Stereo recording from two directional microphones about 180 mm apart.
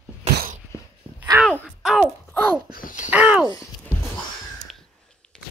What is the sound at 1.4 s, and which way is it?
Speech, 5° left (ahead or behind).